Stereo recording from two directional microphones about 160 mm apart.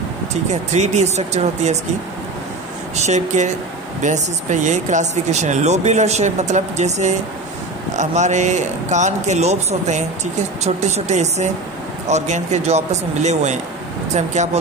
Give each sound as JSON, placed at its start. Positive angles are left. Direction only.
{"t": 0.3, "sound": "speech", "side_deg": -45}
{"t": 3.1, "sound": "speech", "side_deg": -50}